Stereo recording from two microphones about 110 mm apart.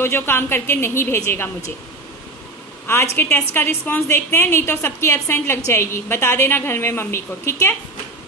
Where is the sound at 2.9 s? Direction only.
20° left (ahead or behind).